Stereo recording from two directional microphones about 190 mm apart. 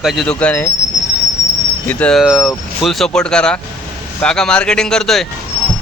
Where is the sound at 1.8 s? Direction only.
5° left (ahead or behind).